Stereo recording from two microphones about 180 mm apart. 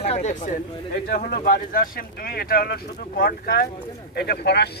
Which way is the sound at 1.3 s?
55° left (ahead or behind).